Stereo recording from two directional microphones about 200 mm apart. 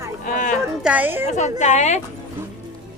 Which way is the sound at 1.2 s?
35° left (ahead or behind).